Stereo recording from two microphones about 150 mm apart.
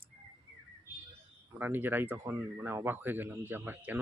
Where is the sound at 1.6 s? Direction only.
15° right (ahead or behind).